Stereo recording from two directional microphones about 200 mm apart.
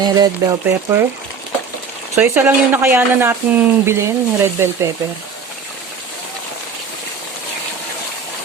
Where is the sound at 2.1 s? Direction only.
10° right (ahead or behind).